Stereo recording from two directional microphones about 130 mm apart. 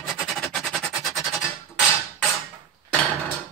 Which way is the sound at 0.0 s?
Centre (ahead or behind).